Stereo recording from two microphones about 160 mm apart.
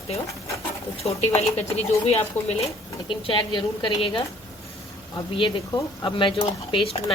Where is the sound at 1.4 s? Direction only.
40° left (ahead or behind).